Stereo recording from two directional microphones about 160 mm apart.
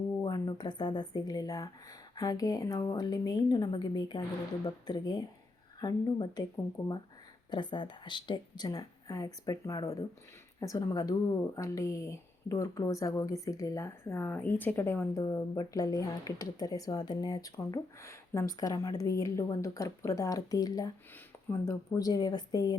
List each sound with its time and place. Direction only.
0.2 s speech: 25° left (ahead or behind)